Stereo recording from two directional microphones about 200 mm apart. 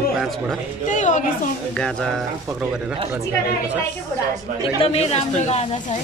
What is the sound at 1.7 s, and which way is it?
Speech, 5° left (ahead or behind).